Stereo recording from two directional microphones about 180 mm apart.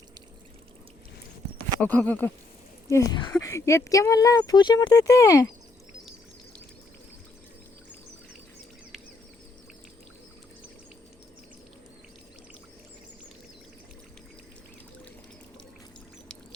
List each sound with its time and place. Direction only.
1.8 s speech: 10° left (ahead or behind)
2.9 s speech: 20° left (ahead or behind)